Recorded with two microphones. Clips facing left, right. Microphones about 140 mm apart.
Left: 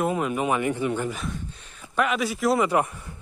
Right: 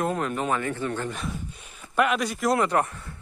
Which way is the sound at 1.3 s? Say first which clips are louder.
Even; 10° right (ahead or behind).